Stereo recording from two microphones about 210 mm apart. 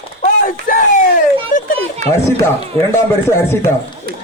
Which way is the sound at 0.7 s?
40° left (ahead or behind).